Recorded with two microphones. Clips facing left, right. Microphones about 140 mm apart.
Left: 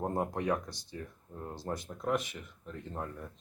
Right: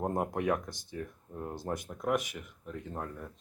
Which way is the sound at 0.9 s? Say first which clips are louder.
Right 4 dB; 10° right (ahead or behind).